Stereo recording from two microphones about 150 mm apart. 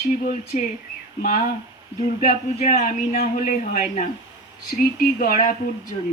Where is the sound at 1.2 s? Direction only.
65° left (ahead or behind).